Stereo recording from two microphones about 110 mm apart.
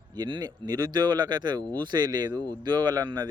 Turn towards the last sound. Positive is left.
turn(degrees=-40)  # may be behind; listen again after turning